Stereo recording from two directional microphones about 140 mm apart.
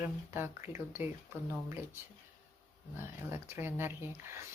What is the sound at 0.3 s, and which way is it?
Speech, 15° right (ahead or behind).